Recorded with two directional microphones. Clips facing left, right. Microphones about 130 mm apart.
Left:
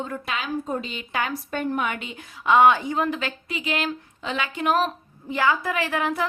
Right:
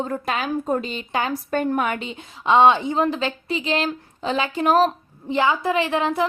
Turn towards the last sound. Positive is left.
turn(degrees=-25)  # may be behind; listen again after turning